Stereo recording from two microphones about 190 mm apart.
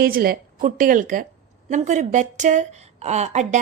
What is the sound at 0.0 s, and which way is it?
A woman's voice, 50° right (ahead or behind).